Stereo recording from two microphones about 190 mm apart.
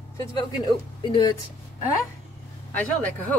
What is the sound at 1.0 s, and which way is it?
Speech, 20° left (ahead or behind).